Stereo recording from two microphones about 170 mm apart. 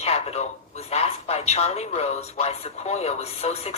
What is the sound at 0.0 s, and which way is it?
A woman's voice, 40° left (ahead or behind).